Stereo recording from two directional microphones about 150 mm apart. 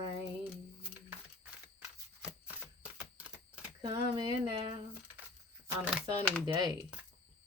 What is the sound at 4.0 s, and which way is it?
Speech, 30° right (ahead or behind).